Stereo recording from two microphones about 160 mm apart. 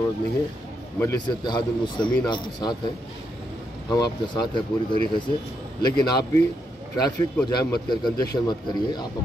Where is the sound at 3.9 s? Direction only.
25° left (ahead or behind).